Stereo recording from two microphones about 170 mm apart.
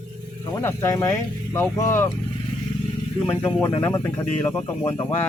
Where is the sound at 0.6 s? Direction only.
15° left (ahead or behind).